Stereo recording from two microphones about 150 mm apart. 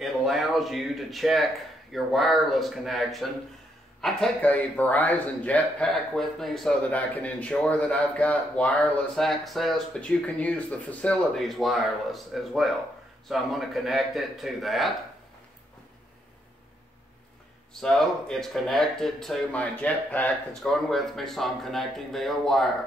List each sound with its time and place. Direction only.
0.0 s a man's voice: centre (ahead or behind)
17.7 s speech: centre (ahead or behind)